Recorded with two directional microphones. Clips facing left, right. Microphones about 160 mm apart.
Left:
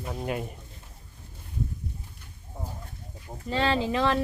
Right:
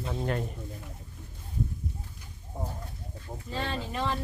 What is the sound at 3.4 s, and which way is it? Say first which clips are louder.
Speech: left 9 dB; 90° left.